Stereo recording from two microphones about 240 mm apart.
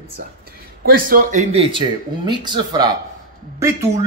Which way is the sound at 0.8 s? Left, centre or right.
Right.